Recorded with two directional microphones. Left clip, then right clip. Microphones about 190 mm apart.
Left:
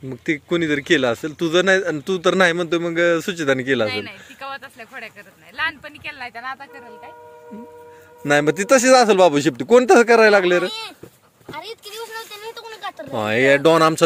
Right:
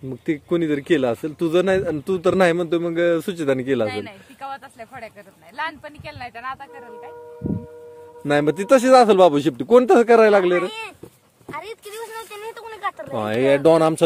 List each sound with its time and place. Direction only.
0.1 s a man's voice: 10° right (ahead or behind)
3.9 s speech: 65° right (ahead or behind)
8.2 s speech: 5° right (ahead or behind)
12.6 s speech: 5° right (ahead or behind)